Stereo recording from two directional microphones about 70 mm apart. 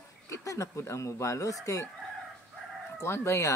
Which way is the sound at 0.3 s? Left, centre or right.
Left.